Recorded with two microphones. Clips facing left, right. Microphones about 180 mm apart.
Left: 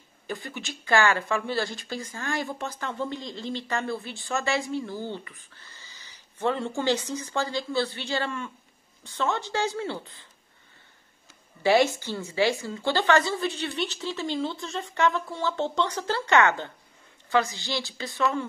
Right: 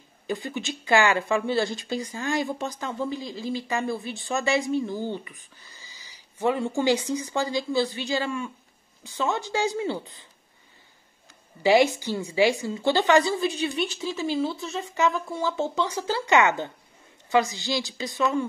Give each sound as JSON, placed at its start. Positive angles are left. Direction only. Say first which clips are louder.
{"t": 0.3, "sound": "speech", "louder": "right 5 dB", "side_deg": -15}
{"t": 11.6, "sound": "speech", "louder": "right 2 dB", "side_deg": -15}